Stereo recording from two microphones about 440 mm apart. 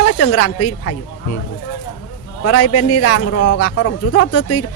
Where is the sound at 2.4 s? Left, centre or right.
Left.